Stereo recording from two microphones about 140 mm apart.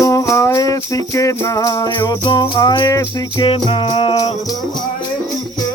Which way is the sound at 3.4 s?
40° left (ahead or behind).